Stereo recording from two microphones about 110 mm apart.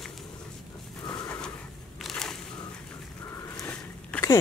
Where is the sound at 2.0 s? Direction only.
5° left (ahead or behind).